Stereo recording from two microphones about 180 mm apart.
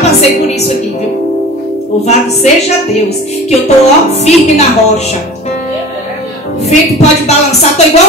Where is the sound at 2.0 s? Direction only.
35° left (ahead or behind).